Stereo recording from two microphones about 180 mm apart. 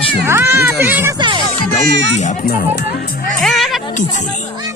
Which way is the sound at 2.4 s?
60° left (ahead or behind).